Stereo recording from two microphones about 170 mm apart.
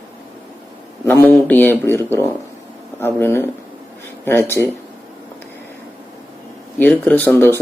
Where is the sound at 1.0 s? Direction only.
10° left (ahead or behind).